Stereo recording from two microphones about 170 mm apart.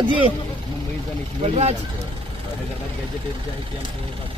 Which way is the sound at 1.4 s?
40° right (ahead or behind).